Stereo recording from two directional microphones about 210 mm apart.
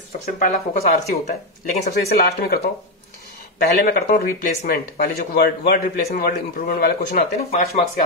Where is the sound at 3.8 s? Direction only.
50° left (ahead or behind).